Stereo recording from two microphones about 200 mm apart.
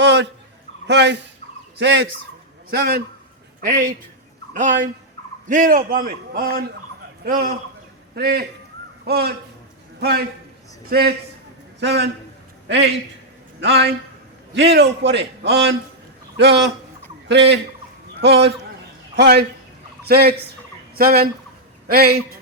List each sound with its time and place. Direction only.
0.0 s fowl: 60° right (ahead or behind)
0.9 s a man's voice: 60° right (ahead or behind)
5.5 s a man's voice: 45° right (ahead or behind); by 17.6 s 60° right (ahead or behind)
19.1 s a man's voice: 55° right (ahead or behind)
20.9 s fowl: 50° right (ahead or behind)
21.8 s a man's voice: 50° right (ahead or behind)